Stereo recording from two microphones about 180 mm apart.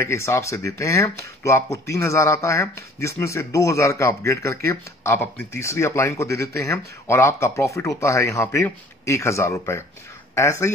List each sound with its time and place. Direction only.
0.0 s speech: 15° left (ahead or behind)